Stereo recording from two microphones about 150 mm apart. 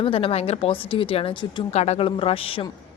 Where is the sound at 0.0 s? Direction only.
40° left (ahead or behind).